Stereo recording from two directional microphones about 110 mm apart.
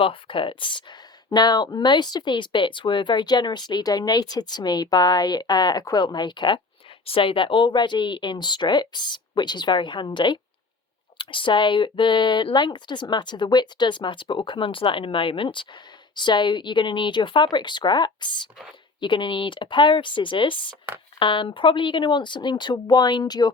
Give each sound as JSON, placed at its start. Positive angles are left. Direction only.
{"t": 0.0, "sound": "speech", "side_deg": 55}
{"t": 7.0, "sound": "speech", "side_deg": 55}